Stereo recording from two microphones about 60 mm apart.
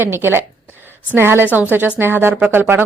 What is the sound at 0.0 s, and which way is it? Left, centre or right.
A woman's voice, right.